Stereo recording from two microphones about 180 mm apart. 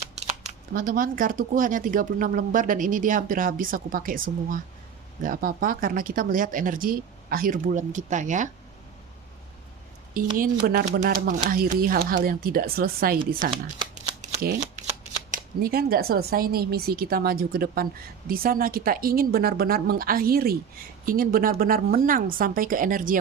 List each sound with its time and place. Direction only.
0.7 s speech: 50° right (ahead or behind)
5.2 s speech: 50° right (ahead or behind)
10.2 s speech: 55° right (ahead or behind)
15.3 s speech: 55° right (ahead or behind)